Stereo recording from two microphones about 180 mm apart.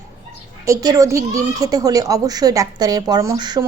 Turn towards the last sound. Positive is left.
turn(degrees=-20)  # may be behind; listen again after turning